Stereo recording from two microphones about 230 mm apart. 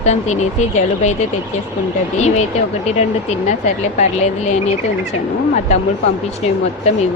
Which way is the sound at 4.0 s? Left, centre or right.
Left.